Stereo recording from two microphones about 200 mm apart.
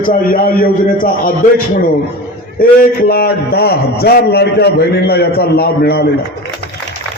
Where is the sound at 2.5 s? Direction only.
45° left (ahead or behind).